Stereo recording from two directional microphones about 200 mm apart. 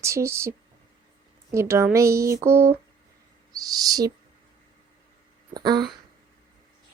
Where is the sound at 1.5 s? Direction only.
15° right (ahead or behind).